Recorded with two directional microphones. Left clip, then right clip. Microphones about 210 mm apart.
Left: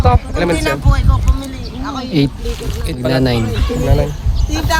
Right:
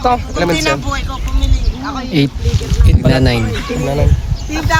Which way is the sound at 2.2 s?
Centre (ahead or behind).